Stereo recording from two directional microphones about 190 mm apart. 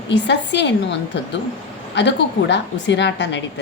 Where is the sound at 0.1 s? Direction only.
65° left (ahead or behind).